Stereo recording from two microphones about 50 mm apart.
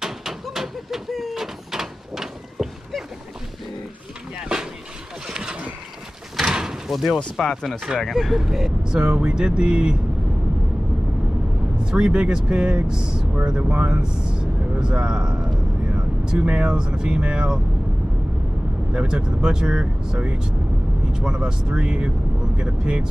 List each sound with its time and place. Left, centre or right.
0.0 s a sound: centre
5.3 s boat: centre
6.4 s door: centre
6.9 s speech: centre
7.3 s speech: centre
11.8 s speech: centre
18.9 s speech: centre